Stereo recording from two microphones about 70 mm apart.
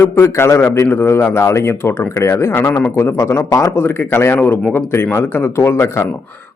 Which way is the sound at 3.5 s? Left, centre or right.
Left.